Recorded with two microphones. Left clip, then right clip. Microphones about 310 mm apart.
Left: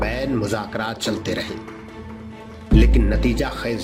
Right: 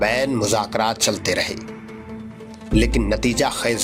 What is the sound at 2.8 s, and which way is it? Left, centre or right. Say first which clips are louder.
Speech: right 2 dB; centre.